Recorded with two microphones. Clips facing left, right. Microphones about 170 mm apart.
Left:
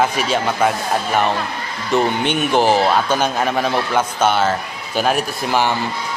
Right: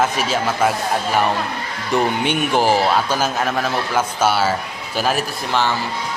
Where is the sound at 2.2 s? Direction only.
10° right (ahead or behind).